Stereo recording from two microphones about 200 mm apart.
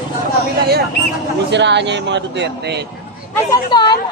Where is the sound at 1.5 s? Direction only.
60° right (ahead or behind).